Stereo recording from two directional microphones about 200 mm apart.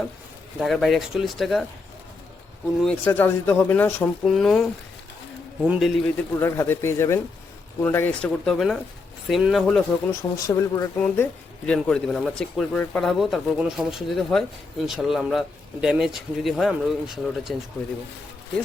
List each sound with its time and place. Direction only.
0.6 s speech: centre (ahead or behind)
2.8 s speech: 10° left (ahead or behind)
5.6 s speech: 5° right (ahead or behind)
6.3 s speech: 15° left (ahead or behind)
10.1 s speech: 15° left (ahead or behind)
11.0 s speech: 5° left (ahead or behind)